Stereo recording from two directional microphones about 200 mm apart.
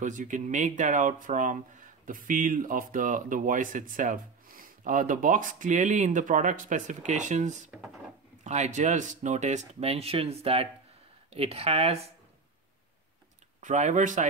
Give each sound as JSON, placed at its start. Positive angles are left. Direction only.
{"t": 0.0, "sound": "speech", "side_deg": -40}
{"t": 13.6, "sound": "speech", "side_deg": -35}